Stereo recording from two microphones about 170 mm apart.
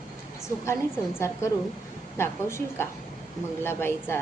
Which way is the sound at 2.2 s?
15° left (ahead or behind).